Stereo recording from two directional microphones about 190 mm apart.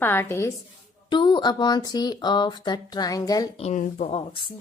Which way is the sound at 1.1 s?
25° left (ahead or behind).